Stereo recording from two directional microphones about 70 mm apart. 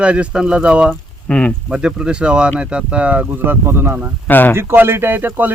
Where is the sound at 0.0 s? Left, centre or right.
Centre.